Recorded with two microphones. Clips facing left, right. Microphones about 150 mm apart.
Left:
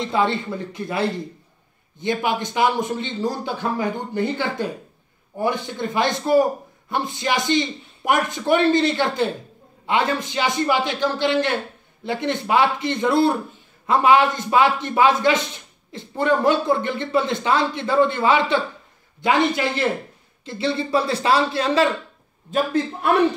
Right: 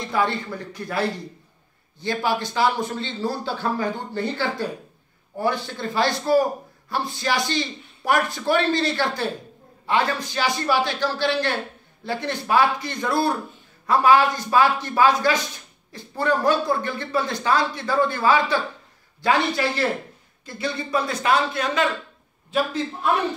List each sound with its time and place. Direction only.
0.0 s a man's voice: 25° left (ahead or behind)
22.5 s a man's voice: 55° left (ahead or behind)